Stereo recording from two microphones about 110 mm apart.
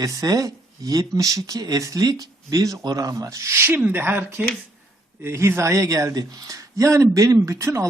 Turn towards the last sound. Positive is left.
turn(degrees=-25)  # may be behind; listen again after turning